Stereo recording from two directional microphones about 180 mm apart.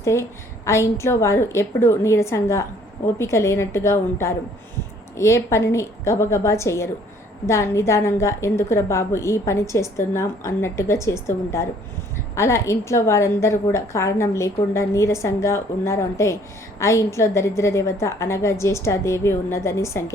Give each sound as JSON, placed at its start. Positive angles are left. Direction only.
{"t": 0.0, "sound": "a woman's voice", "side_deg": 15}